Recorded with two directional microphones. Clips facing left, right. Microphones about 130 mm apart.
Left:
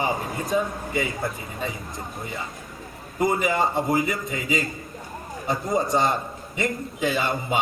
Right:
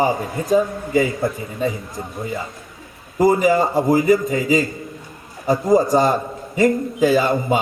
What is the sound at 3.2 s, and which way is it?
A man's voice, 35° right (ahead or behind).